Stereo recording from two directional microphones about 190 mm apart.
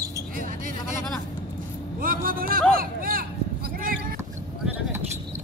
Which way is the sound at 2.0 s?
50° right (ahead or behind).